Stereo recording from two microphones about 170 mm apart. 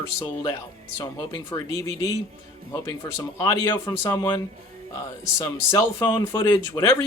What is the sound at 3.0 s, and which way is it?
Speech, 20° left (ahead or behind).